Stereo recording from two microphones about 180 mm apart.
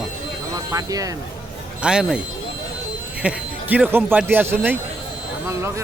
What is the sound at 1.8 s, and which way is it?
Speech, 5° right (ahead or behind).